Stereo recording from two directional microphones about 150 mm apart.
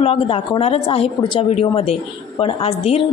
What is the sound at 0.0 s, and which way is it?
A woman's voice, 40° left (ahead or behind).